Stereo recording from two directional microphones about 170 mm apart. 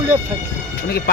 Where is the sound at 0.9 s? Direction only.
65° left (ahead or behind).